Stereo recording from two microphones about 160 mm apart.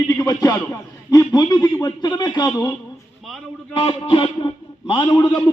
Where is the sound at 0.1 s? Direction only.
20° left (ahead or behind).